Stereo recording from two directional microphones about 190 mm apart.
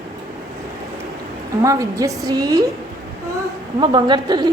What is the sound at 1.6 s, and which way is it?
Speech, 15° right (ahead or behind).